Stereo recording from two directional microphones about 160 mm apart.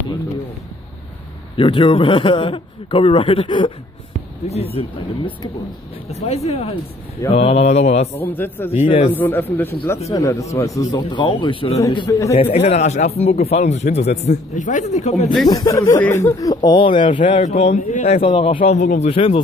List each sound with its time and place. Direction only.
1.6 s speech: 35° left (ahead or behind)
8.2 s a man's voice: 10° left (ahead or behind)
8.8 s speech: 35° left (ahead or behind)
9.1 s a man's voice: 10° left (ahead or behind)
12.5 s speech: 40° left (ahead or behind)
15.5 s speech: 20° left (ahead or behind)
17.4 s speech: 45° left (ahead or behind)